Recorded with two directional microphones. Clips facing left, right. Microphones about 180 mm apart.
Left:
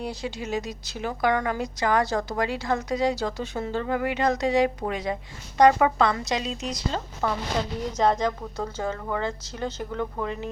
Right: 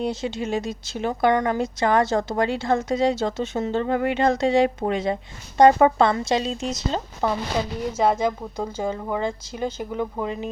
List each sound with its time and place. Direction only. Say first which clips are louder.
0.0 s speech: right 6 dB; 25° right (ahead or behind)
7.9 s speech: right 2 dB; 10° right (ahead or behind)